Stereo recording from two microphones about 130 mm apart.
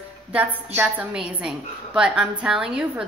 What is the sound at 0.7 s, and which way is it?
A woman's voice, 10° right (ahead or behind).